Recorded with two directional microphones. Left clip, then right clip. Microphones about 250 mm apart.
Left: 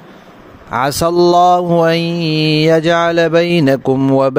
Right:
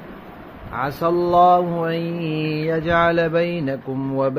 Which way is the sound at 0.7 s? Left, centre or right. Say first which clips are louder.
Left 7 dB; left.